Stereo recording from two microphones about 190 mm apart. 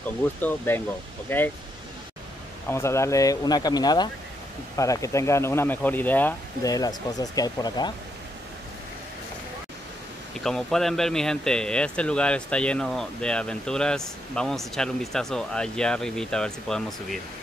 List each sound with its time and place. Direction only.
0.4 s speech: 10° left (ahead or behind)
2.7 s speech: 15° left (ahead or behind)
10.4 s speech: centre (ahead or behind)